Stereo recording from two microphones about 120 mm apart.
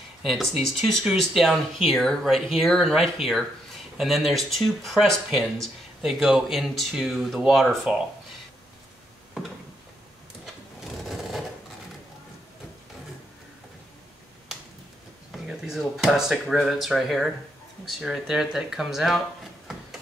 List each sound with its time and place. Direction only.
0.2 s speech: centre (ahead or behind)
10.4 s sewing machine: centre (ahead or behind)
15.3 s speech: 5° right (ahead or behind)